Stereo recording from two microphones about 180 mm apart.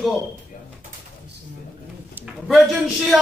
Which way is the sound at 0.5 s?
50° left (ahead or behind).